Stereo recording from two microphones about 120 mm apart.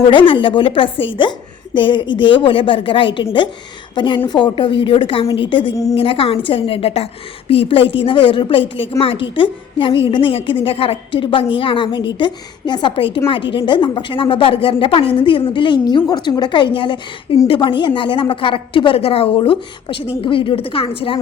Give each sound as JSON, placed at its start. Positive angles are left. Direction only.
{"t": 0.1, "sound": "a woman's voice", "side_deg": 45}
{"t": 5.7, "sound": "a woman's voice", "side_deg": 30}
{"t": 6.0, "sound": "a woman's voice", "side_deg": 50}